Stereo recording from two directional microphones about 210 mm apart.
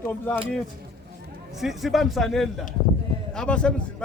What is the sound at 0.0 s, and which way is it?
Speech, 10° left (ahead or behind).